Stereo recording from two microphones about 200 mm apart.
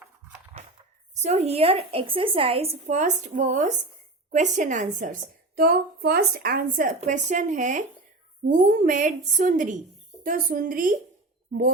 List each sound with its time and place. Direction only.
1.1 s a woman's voice: 35° right (ahead or behind)